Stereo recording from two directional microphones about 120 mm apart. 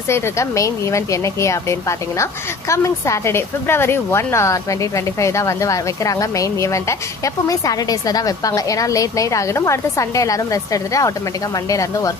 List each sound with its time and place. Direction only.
0.1 s a woman's voice: 25° left (ahead or behind)